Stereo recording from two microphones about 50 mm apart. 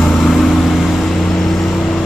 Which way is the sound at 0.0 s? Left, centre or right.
Centre.